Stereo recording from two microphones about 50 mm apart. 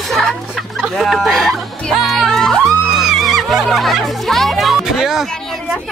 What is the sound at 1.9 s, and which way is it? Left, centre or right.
Music, centre.